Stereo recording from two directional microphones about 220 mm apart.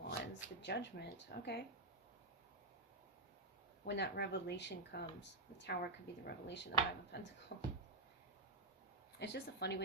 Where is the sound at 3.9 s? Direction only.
50° left (ahead or behind).